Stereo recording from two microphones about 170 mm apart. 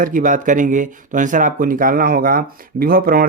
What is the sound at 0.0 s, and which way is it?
Speech, 50° right (ahead or behind).